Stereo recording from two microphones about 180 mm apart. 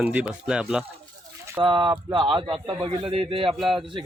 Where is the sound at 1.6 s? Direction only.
25° right (ahead or behind).